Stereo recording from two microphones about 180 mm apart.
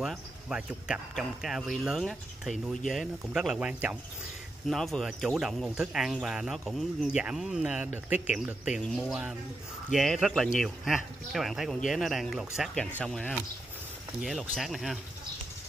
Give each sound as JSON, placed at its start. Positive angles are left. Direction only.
{"t": 0.0, "sound": "speech", "side_deg": -5}